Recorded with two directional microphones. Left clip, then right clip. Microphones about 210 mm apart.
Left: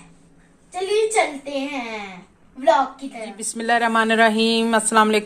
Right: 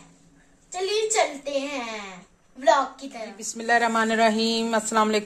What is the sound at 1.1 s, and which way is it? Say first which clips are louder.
Speech: left 3 dB; 5° right (ahead or behind).